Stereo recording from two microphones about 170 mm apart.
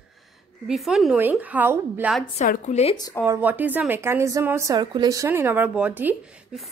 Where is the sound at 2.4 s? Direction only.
40° left (ahead or behind).